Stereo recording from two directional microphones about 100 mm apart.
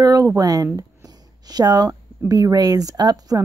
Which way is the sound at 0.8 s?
35° right (ahead or behind).